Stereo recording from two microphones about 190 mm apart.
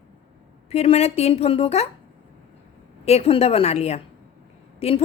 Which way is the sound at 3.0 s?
35° left (ahead or behind).